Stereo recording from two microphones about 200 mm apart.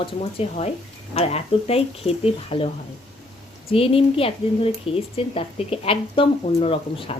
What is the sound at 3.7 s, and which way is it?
Speech, 30° left (ahead or behind).